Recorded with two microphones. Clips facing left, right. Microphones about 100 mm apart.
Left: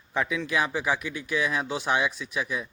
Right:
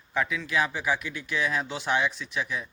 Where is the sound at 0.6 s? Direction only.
20° left (ahead or behind).